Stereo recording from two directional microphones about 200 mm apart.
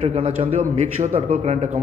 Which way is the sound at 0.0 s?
30° right (ahead or behind).